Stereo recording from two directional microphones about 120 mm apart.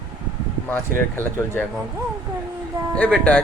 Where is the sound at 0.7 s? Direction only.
15° left (ahead or behind).